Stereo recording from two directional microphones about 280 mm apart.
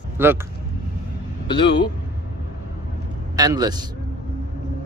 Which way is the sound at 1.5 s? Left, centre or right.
Centre.